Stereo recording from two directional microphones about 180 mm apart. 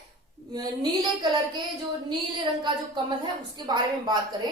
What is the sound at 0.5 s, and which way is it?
A woman's voice, 20° right (ahead or behind).